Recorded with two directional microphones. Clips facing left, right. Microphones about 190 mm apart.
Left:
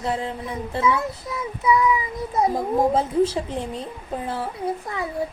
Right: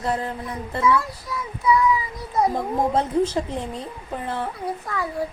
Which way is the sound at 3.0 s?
5° left (ahead or behind).